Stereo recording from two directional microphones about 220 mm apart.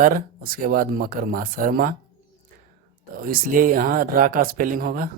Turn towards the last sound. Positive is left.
turn(degrees=-40)  # may be behind; listen again after turning